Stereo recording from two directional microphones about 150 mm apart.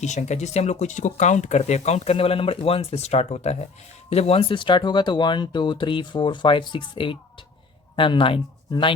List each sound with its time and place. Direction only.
0.0 s speech: 50° left (ahead or behind); by 8.9 s 35° left (ahead or behind)